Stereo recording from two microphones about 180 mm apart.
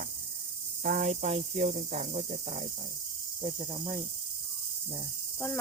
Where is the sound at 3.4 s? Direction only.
20° right (ahead or behind).